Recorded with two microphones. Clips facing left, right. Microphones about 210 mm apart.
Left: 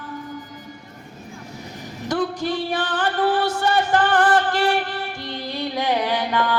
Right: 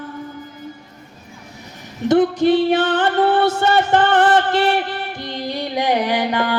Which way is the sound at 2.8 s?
25° right (ahead or behind).